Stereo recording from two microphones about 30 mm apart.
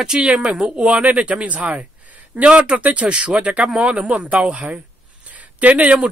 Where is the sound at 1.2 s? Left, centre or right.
Right.